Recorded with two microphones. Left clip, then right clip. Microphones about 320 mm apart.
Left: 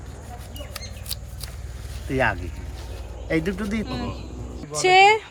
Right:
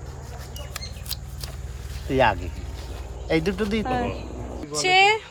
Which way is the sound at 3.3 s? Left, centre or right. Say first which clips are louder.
Right 1 dB; centre.